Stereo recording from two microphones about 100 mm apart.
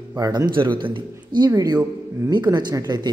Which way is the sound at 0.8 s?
50° right (ahead or behind).